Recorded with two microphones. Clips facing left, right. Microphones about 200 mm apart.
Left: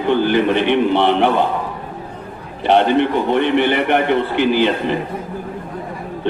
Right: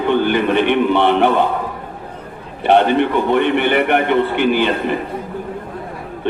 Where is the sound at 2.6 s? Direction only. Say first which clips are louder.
Right 1 dB; 55° right (ahead or behind).